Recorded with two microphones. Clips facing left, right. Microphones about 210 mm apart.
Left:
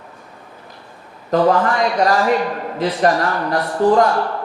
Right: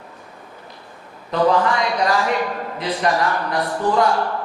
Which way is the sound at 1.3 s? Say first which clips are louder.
Left 2 dB; 45° left (ahead or behind).